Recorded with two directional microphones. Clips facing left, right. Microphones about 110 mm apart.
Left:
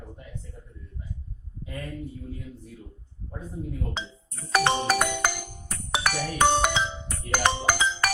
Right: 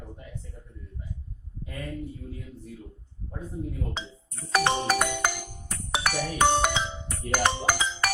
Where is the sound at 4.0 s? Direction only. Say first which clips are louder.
Left 2 dB; 90° left.